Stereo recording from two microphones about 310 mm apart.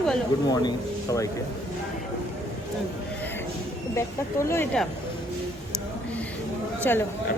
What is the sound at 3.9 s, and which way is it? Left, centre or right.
Speech, centre.